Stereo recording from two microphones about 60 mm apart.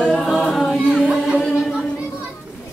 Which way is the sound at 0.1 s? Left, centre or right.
Centre.